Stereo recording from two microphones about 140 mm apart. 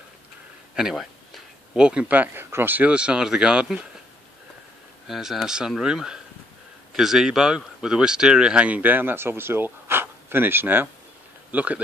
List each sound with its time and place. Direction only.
0.7 s speech: 5° right (ahead or behind)
5.0 s speech: centre (ahead or behind)